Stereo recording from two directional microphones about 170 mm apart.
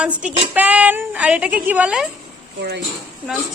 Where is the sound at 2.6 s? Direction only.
85° right.